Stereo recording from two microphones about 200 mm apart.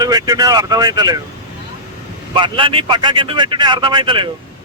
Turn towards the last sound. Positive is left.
turn(degrees=-25)  # may be behind; listen again after turning